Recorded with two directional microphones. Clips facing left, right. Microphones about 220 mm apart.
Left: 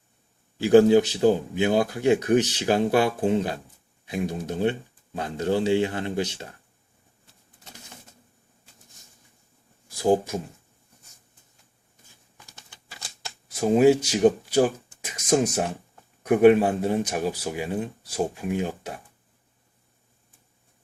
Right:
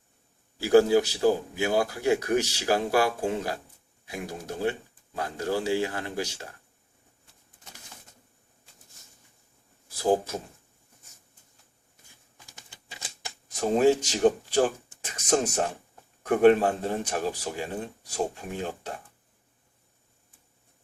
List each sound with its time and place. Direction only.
0.6 s a man's voice: 20° left (ahead or behind)
10.0 s speech: 15° left (ahead or behind)
12.7 s typewriter: 20° right (ahead or behind)
13.5 s speech: 10° left (ahead or behind)